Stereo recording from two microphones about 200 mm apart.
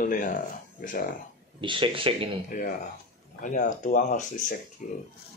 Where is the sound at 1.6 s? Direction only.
25° right (ahead or behind).